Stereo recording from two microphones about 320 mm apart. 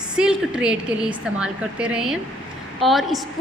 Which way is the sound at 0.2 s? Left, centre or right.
Centre.